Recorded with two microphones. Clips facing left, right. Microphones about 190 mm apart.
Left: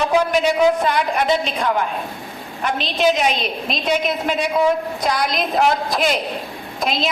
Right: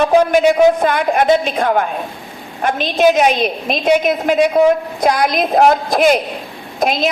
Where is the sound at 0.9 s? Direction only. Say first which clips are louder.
Right 5 dB; 50° right (ahead or behind).